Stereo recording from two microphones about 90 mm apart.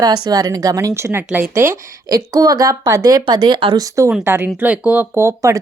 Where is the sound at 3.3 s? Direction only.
55° right (ahead or behind).